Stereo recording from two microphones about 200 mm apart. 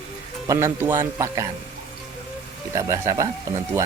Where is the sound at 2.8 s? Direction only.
15° right (ahead or behind).